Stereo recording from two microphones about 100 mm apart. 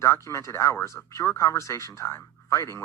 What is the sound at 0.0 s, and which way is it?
Speech, 30° left (ahead or behind).